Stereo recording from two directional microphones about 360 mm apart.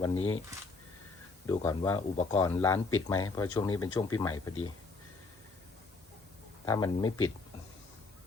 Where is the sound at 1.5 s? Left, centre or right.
Centre.